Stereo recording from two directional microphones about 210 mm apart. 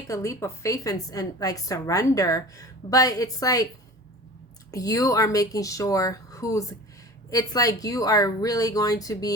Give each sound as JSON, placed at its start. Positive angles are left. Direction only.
{"t": 0.1, "sound": "a woman's voice", "side_deg": 15}
{"t": 4.7, "sound": "a woman's voice", "side_deg": 15}